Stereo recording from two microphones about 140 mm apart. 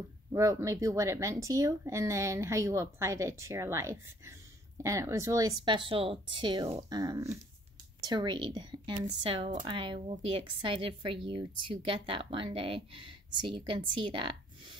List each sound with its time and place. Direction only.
0.3 s speech: 20° right (ahead or behind); by 14.8 s 35° right (ahead or behind)